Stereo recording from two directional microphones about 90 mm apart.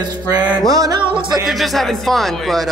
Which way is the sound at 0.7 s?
40° right (ahead or behind).